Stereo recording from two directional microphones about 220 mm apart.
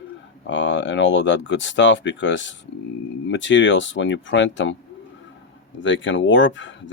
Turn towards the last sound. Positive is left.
turn(degrees=55)  # may be behind; listen again after turning